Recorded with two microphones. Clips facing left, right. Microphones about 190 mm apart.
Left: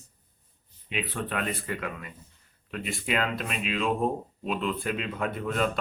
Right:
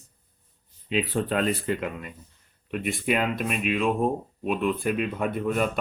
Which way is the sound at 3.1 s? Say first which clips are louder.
Right 3 dB; 15° right (ahead or behind).